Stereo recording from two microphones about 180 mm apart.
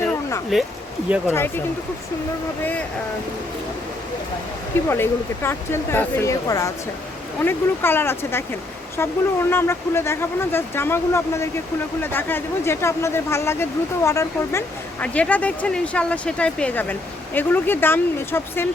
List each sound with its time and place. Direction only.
0.0 s a sound: 15° left (ahead or behind)
1.3 s speech: 15° left (ahead or behind)
4.9 s speech: 15° left (ahead or behind)